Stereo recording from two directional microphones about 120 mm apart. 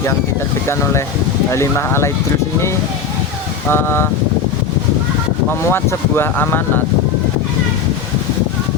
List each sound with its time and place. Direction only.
1.5 s speech: 25° left (ahead or behind)
3.7 s speech: 20° left (ahead or behind)
5.5 s speech: 20° left (ahead or behind)